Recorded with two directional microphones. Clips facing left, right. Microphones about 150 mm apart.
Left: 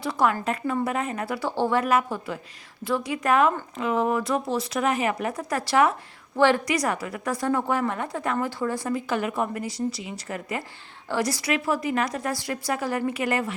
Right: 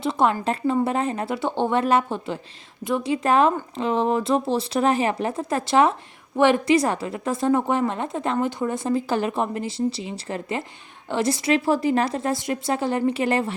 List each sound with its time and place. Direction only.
0.0 s a woman's voice: 25° right (ahead or behind)